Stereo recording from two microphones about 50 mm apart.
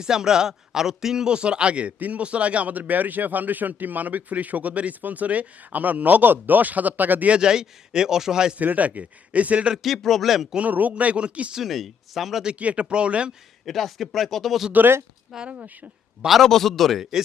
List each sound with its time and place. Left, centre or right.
0.0 s a man's voice: centre; by 7.3 s right
7.3 s speech: centre
8.5 s a man's voice: right
9.8 s speech: centre
10.6 s a man's voice: right
11.5 s speech: centre
12.5 s a man's voice: right
13.7 s speech: centre
14.7 s a man's voice: right
16.4 s speech: centre